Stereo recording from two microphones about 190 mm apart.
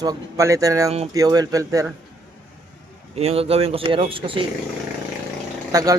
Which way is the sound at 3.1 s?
30° right (ahead or behind).